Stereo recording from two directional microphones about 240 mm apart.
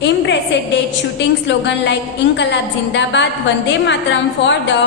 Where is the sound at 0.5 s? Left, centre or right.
Left.